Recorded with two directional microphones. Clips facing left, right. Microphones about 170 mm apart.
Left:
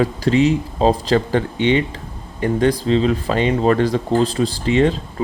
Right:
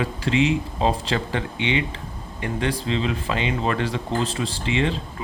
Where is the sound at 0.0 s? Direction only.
40° left (ahead or behind).